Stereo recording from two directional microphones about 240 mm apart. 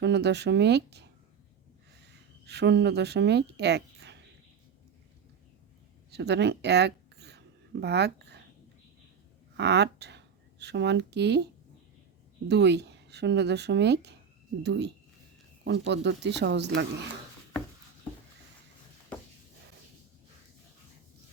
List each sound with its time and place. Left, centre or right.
0.0 s speech: right
2.5 s speech: right
6.1 s speech: right
9.6 s speech: right
12.5 s speech: right